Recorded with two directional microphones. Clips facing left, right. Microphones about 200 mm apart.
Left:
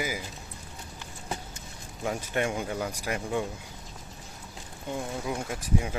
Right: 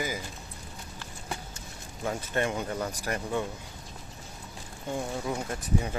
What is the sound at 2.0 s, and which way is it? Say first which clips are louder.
Speech: even; 15° left (ahead or behind).